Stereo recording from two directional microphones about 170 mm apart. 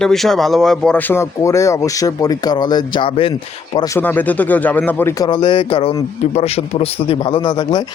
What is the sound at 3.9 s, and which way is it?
Speech, 10° left (ahead or behind).